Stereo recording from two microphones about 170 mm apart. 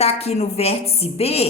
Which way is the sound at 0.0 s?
35° left (ahead or behind).